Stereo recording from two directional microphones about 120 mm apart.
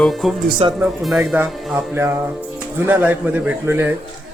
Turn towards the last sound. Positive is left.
turn(degrees=-15)  # may be behind; listen again after turning